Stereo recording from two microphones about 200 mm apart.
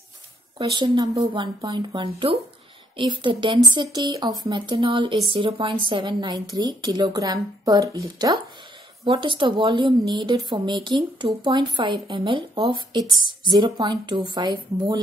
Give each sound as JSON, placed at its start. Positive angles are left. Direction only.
{"t": 0.6, "sound": "speech", "side_deg": -20}